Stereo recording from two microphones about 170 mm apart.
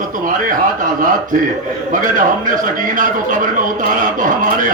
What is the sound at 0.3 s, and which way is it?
A man's voice, 50° right (ahead or behind).